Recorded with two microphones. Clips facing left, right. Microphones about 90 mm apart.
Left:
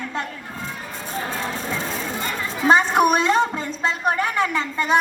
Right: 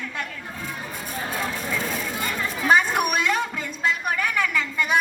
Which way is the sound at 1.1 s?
30° left (ahead or behind).